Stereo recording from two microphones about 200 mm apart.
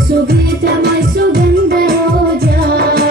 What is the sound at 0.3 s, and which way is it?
Music, 50° right (ahead or behind).